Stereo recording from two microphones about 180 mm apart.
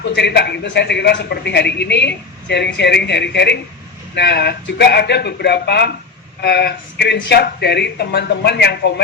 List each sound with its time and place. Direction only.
0.0 s a man's voice: 70° left (ahead or behind)